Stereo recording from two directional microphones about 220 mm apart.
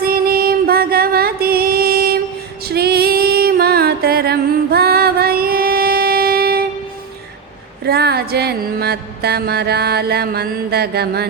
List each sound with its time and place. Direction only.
0.0 s music: 45° right (ahead or behind)
7.9 s mantra: 45° right (ahead or behind)